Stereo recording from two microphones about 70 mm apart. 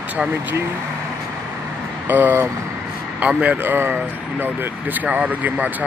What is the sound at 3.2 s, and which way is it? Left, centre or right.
Speech, centre.